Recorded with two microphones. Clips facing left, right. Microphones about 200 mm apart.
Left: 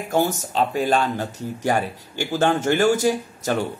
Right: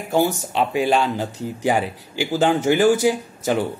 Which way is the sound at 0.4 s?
10° right (ahead or behind).